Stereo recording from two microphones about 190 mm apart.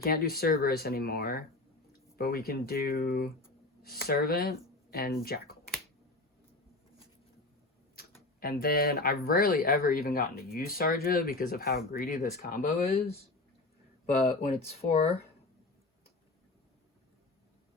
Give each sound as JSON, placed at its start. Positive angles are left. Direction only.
{"t": 0.0, "sound": "speech", "side_deg": 50}
{"t": 7.9, "sound": "speech", "side_deg": 50}
{"t": 14.5, "sound": "speech", "side_deg": 35}